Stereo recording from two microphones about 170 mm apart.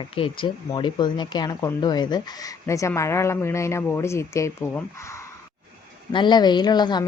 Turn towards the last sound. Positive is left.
turn(degrees=25)  # may be behind; listen again after turning